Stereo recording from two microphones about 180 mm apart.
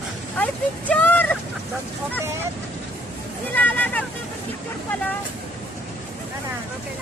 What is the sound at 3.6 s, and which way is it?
Speech, 10° left (ahead or behind).